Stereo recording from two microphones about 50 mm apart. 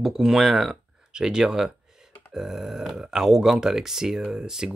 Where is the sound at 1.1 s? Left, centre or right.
Centre.